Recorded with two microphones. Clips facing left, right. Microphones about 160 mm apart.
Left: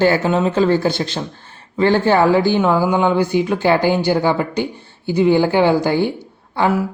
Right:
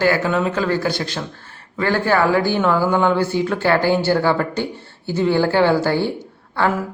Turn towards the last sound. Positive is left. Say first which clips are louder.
# left 3 dB
turn(degrees=15)  # may be behind; listen again after turning